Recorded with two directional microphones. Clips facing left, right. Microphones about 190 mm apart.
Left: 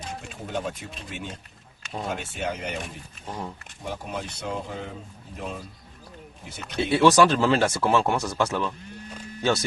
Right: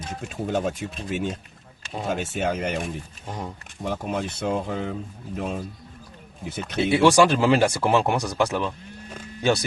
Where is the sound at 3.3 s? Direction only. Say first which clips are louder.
Right 1 dB; 15° right (ahead or behind).